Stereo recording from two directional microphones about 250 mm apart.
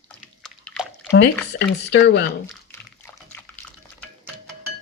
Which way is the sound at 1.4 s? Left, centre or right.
Left.